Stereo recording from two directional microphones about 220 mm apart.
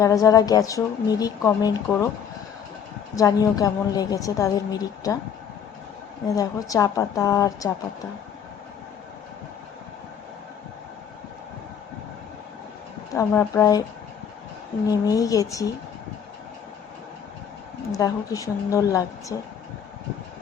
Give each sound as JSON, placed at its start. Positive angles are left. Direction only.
{"t": 0.0, "sound": "a woman's voice", "side_deg": 15}
{"t": 3.2, "sound": "a woman's voice", "side_deg": 15}
{"t": 6.2, "sound": "a woman's voice", "side_deg": 15}
{"t": 13.1, "sound": "a woman's voice", "side_deg": 10}
{"t": 14.8, "sound": "a woman's voice", "side_deg": 15}
{"t": 17.9, "sound": "a woman's voice", "side_deg": 15}